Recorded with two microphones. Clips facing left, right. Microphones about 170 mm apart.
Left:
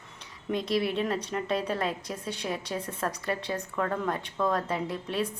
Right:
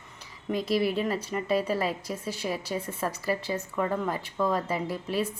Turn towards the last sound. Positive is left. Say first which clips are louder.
# right 1 dB
turn(degrees=-5)  # may be behind; listen again after turning